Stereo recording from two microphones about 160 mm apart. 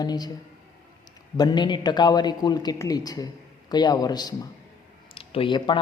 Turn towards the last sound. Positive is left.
turn(degrees=30)  # may be behind; listen again after turning